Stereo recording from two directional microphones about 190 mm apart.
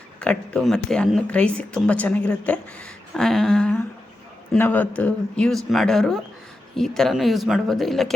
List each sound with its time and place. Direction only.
0.2 s speech: 5° left (ahead or behind)